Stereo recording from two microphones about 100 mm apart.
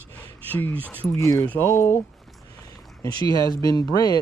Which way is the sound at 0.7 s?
20° right (ahead or behind).